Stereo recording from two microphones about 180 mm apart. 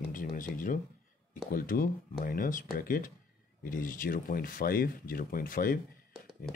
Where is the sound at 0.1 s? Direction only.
50° left (ahead or behind).